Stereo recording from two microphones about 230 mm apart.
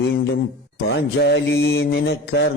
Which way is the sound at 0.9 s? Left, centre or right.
Left.